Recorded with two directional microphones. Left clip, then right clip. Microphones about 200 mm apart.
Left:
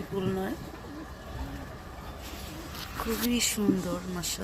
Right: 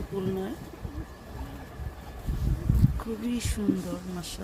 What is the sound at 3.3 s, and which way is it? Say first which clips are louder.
Speech: left 2 dB; 10° left (ahead or behind).